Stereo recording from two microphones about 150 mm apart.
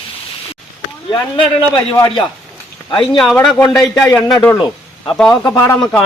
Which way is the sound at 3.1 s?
Centre (ahead or behind).